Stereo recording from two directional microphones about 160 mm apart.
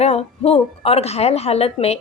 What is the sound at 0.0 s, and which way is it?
A woman's voice, 40° left (ahead or behind).